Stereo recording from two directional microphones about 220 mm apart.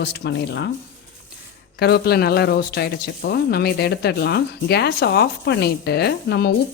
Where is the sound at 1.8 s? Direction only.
45° left (ahead or behind).